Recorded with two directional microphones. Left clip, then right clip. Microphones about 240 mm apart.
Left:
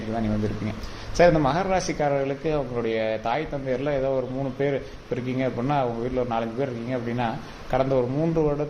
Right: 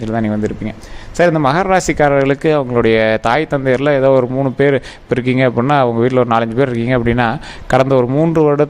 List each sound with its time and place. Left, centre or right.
1.1 s speech: right